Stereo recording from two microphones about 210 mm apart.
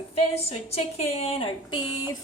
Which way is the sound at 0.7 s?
30° left (ahead or behind).